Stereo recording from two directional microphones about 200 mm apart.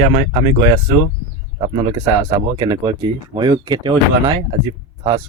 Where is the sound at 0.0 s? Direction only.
20° right (ahead or behind).